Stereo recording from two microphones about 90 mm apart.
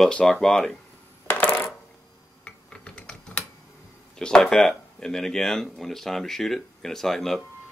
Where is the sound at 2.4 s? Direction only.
10° left (ahead or behind).